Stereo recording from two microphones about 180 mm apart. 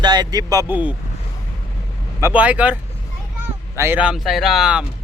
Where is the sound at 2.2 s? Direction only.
5° right (ahead or behind).